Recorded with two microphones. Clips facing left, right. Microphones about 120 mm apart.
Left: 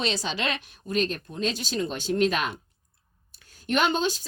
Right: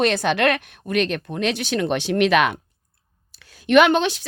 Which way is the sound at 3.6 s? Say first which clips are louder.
Right 9 dB; 80° right.